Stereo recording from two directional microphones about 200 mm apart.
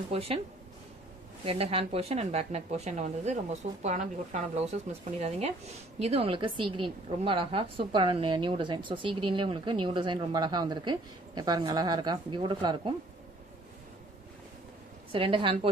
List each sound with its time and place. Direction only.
0.1 s a woman's voice: 30° right (ahead or behind)
1.4 s a woman's voice: 30° right (ahead or behind)
15.1 s a woman's voice: 25° right (ahead or behind)